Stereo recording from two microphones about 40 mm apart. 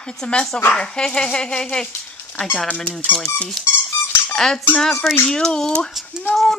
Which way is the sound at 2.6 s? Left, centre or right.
Left.